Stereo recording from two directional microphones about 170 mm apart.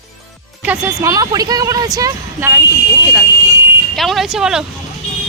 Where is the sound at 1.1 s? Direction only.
20° right (ahead or behind).